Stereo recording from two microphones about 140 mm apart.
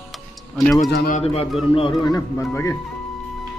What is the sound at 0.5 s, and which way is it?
Speech, centre (ahead or behind).